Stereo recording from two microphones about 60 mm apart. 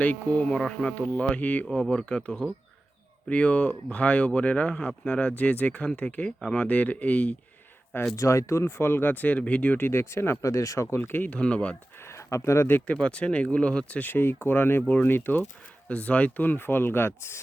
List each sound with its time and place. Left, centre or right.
0.0 s speech: left
0.9 s speech: left
1.8 s speech: centre; by 6.3 s left
6.4 s speech: centre
6.7 s speech: left
8.1 s speech: left
9.8 s speech: left
10.4 s speech: left
10.8 s speech: left
11.2 s speech: centre
11.9 s a sound: left
12.9 s speech: centre
14.1 s speech: left
15.9 s speech: left